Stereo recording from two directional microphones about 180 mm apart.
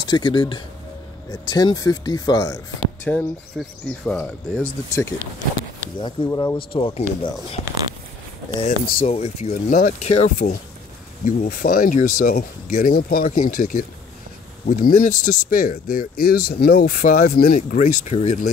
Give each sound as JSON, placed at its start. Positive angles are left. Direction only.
{"t": 0.1, "sound": "speech", "side_deg": 25}
{"t": 8.6, "sound": "speech", "side_deg": 50}
{"t": 9.0, "sound": "speech", "side_deg": 35}
{"t": 9.5, "sound": "speech", "side_deg": 45}
{"t": 11.4, "sound": "speech", "side_deg": 50}